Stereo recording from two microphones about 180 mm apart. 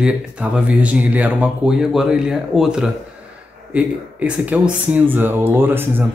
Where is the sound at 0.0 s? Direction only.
5° right (ahead or behind).